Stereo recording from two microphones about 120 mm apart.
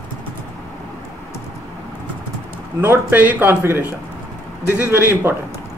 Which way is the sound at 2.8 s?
15° right (ahead or behind).